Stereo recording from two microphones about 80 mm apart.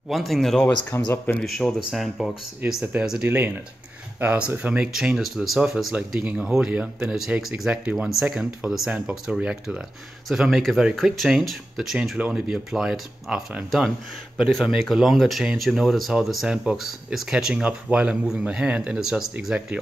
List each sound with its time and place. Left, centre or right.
0.1 s speech: centre
0.9 s speech: left
1.4 s speech: centre
3.3 s speech: right; by 19.8 s centre